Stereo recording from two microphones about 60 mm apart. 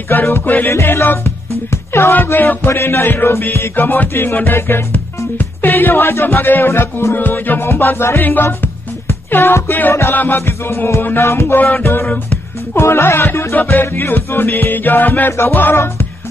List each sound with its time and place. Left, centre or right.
0.1 s music: left
0.5 s music: left
0.7 s music: left
1.7 s speech: left
2.2 s music: left
3.7 s music: left
7.2 s music: left